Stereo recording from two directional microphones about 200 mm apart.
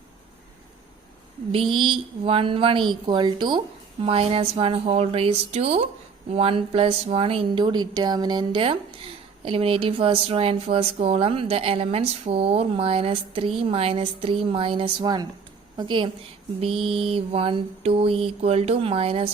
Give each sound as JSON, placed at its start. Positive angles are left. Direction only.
{"t": 1.7, "sound": "speech", "side_deg": -25}